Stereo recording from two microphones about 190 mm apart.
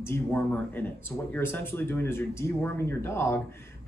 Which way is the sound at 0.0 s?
10° left (ahead or behind).